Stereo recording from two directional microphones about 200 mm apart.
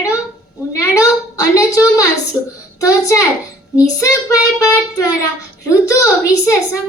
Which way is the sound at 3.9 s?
15° left (ahead or behind).